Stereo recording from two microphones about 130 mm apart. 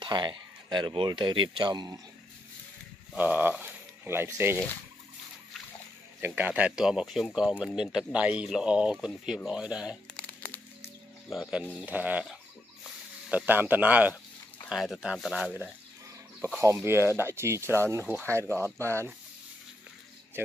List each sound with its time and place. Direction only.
0.0 s speech: 35° right (ahead or behind)
3.2 s speech: 15° right (ahead or behind)
6.2 s speech: 15° right (ahead or behind)
10.1 s music: 15° left (ahead or behind)
11.7 s speech: 10° right (ahead or behind)
13.5 s speech: 15° right (ahead or behind)
16.6 s speech: 20° right (ahead or behind)
20.4 s speech: 15° right (ahead or behind)